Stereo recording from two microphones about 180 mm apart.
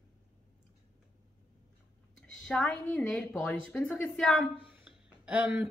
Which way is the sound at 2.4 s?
Centre (ahead or behind).